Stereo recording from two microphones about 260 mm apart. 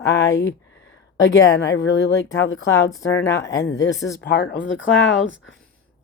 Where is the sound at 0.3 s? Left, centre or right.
Left.